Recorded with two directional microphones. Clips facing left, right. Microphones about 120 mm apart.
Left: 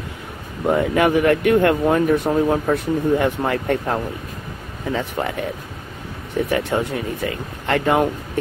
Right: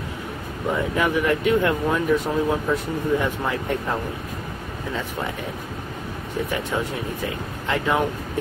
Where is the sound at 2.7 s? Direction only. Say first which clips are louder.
Left 4 dB; 60° left (ahead or behind).